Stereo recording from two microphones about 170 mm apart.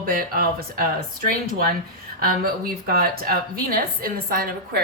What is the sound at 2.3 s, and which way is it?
A woman's voice, 60° right (ahead or behind).